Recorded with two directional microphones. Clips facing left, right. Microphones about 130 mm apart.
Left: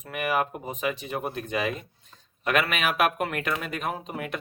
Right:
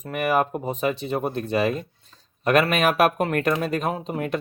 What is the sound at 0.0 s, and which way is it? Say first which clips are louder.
Speech: right 5 dB; 40° right (ahead or behind).